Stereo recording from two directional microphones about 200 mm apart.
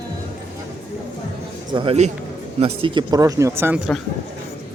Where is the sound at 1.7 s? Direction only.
25° right (ahead or behind); by 3.8 s 10° right (ahead or behind).